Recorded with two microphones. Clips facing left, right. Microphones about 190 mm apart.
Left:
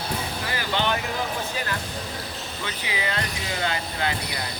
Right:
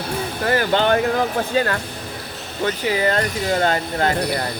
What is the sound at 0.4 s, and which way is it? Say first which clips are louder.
Speech: right 10 dB; 50° right (ahead or behind).